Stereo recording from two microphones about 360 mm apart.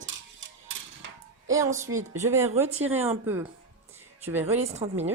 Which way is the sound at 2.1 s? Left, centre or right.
Centre.